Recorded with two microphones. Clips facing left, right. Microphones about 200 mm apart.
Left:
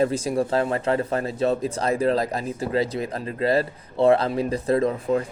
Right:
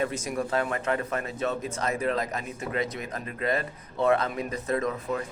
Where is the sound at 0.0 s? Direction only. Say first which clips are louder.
Left 7 dB; 30° left (ahead or behind).